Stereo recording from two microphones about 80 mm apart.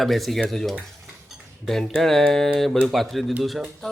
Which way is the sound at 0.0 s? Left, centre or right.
Centre.